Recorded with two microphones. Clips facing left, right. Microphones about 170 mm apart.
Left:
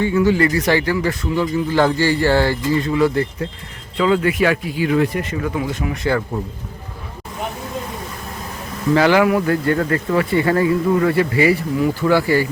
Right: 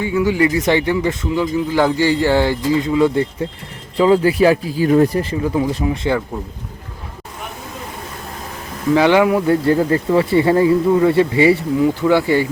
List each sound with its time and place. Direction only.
0.0 s speech: 10° right (ahead or behind)
3.9 s a man's voice: 30° right (ahead or behind)
9.0 s a man's voice: 20° right (ahead or behind)